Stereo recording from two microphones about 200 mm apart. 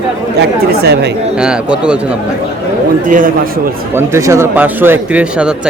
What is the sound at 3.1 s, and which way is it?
Speech, 45° right (ahead or behind).